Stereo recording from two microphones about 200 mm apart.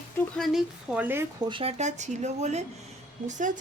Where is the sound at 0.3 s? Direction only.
Centre (ahead or behind).